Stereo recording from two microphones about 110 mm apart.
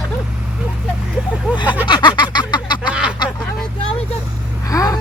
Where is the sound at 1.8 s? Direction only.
45° left (ahead or behind).